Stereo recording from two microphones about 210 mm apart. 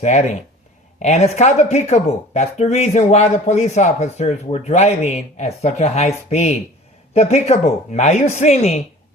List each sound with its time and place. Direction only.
0.0 s speech: 35° left (ahead or behind)